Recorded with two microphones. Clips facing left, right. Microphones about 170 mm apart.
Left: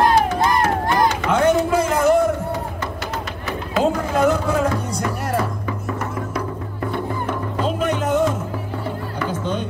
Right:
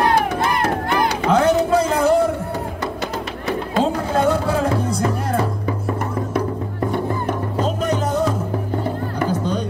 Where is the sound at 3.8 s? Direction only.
30° right (ahead or behind).